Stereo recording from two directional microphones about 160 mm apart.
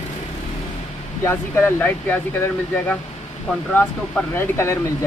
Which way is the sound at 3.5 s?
10° left (ahead or behind).